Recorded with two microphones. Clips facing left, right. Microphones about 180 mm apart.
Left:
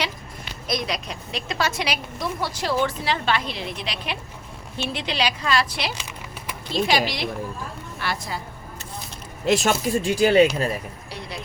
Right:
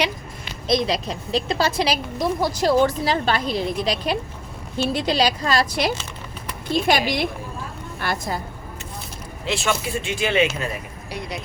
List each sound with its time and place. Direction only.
0.7 s a woman's voice: 30° right (ahead or behind); by 8.4 s 50° right (ahead or behind)
9.5 s speech: 40° left (ahead or behind)